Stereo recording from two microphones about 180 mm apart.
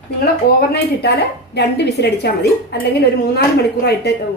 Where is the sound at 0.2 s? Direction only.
65° left (ahead or behind).